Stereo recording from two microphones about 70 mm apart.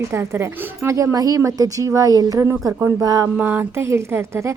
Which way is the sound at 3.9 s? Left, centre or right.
Right.